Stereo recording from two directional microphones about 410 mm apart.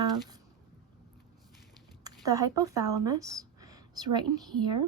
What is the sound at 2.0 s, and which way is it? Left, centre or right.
Speech, centre.